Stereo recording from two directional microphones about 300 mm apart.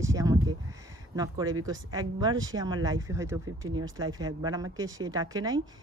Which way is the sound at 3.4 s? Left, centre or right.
Right.